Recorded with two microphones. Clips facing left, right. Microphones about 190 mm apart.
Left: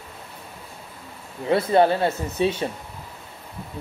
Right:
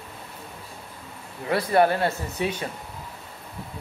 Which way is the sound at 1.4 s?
25° left (ahead or behind).